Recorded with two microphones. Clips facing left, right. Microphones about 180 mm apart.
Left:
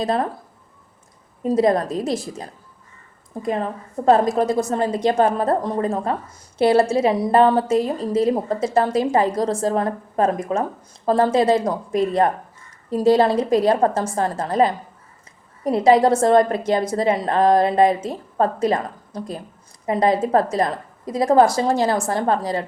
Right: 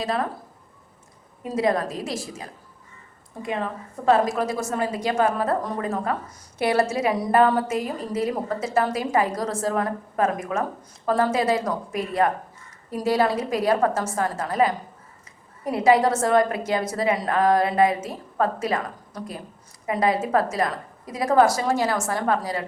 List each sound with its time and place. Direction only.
0.0 s a woman's voice: 35° left (ahead or behind)
1.4 s a woman's voice: 35° left (ahead or behind)
3.4 s a woman's voice: 40° left (ahead or behind)